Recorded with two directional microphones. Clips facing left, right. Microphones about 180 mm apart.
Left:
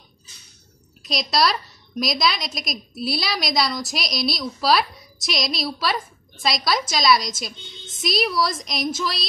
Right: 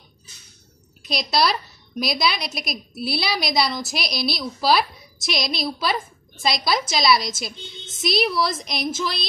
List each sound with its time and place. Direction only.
1.0 s a woman's voice: 5° right (ahead or behind)